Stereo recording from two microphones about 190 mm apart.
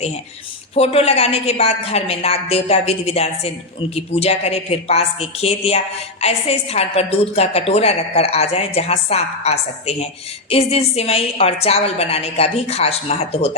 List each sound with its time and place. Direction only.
0.8 s a woman's voice: 30° left (ahead or behind)